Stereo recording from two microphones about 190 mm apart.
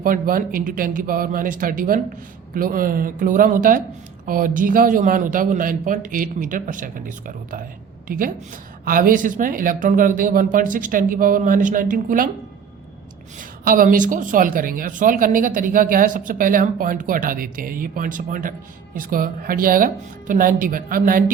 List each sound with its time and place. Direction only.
0.0 s a woman's voice: 50° right (ahead or behind)
13.4 s speech: 45° right (ahead or behind)